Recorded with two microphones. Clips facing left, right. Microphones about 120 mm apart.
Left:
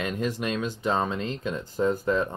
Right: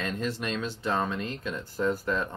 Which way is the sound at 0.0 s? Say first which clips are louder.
Left 3 dB; 15° left (ahead or behind).